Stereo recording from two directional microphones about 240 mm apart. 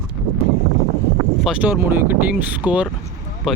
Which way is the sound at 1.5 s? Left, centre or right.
Centre.